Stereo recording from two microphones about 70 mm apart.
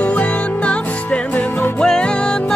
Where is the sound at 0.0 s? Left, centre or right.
Centre.